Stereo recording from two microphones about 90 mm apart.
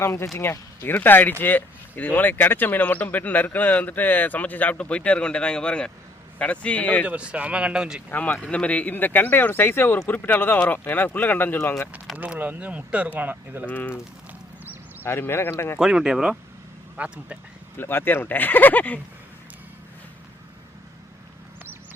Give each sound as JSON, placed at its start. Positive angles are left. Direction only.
{"t": 0.0, "sound": "a man's voice", "side_deg": 30}
{"t": 7.0, "sound": "speech", "side_deg": -15}
{"t": 8.1, "sound": "speech", "side_deg": 20}
{"t": 12.1, "sound": "speech", "side_deg": -15}
{"t": 13.7, "sound": "speech", "side_deg": 20}
{"t": 15.0, "sound": "speech", "side_deg": 25}
{"t": 15.8, "sound": "speech", "side_deg": -5}
{"t": 17.0, "sound": "speech", "side_deg": -15}
{"t": 17.7, "sound": "speech", "side_deg": 25}